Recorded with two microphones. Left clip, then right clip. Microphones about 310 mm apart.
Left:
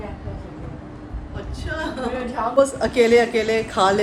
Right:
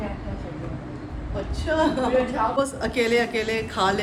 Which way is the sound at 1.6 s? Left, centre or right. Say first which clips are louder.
Right 5 dB; centre.